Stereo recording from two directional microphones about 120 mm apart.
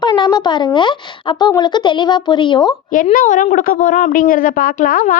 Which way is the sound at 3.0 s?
90° left.